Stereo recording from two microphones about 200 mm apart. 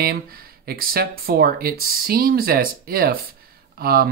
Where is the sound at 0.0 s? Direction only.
50° right (ahead or behind).